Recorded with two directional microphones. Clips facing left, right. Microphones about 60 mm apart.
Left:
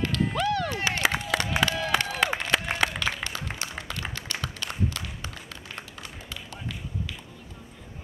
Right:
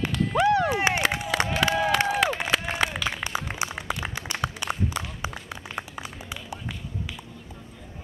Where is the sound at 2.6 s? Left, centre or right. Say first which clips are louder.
Right 1 dB; centre.